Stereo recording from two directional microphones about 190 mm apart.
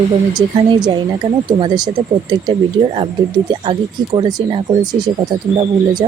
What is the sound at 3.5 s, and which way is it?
Speech, 25° right (ahead or behind).